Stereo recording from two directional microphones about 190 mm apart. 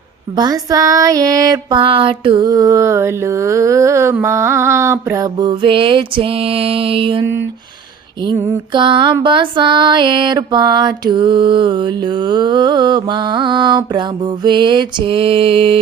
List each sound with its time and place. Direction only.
0.3 s music: 20° right (ahead or behind)